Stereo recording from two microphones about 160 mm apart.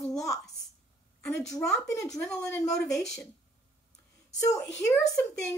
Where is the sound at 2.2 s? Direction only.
15° left (ahead or behind).